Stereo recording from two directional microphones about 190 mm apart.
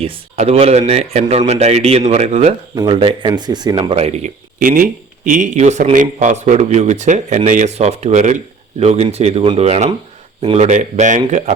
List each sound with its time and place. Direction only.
0.0 s speech: 30° right (ahead or behind)
4.6 s speech: 45° right (ahead or behind)